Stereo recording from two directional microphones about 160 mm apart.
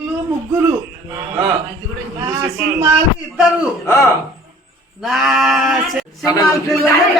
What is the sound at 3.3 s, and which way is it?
Speech, 5° right (ahead or behind).